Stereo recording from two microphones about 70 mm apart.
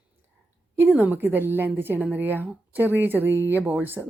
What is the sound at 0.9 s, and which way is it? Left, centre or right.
Speech, right.